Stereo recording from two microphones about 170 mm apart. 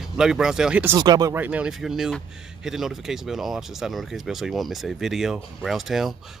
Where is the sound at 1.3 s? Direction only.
10° right (ahead or behind).